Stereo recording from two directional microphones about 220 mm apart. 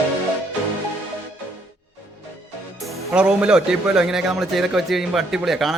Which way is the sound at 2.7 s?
Centre (ahead or behind).